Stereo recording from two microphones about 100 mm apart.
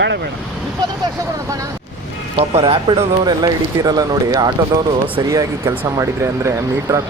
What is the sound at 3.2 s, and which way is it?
Speech, 40° right (ahead or behind).